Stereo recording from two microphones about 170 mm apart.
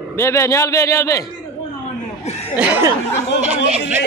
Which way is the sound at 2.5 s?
10° right (ahead or behind).